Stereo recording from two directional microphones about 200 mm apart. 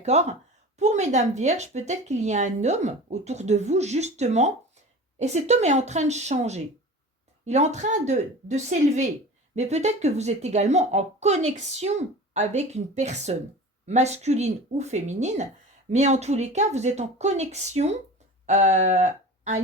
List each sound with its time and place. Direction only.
0.0 s speech: 35° right (ahead or behind)